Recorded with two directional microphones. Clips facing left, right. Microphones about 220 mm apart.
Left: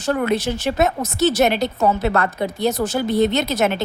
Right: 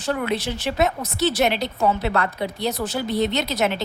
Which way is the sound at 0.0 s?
45° left (ahead or behind).